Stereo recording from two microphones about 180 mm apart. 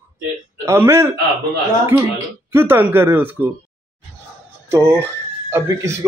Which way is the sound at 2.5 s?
10° right (ahead or behind).